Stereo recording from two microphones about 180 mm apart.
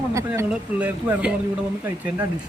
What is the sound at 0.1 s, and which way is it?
Speech, 15° right (ahead or behind).